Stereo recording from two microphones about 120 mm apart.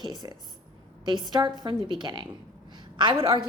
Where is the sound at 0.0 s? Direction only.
35° right (ahead or behind).